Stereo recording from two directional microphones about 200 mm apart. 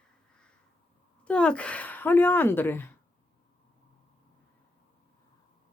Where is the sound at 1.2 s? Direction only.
5° left (ahead or behind).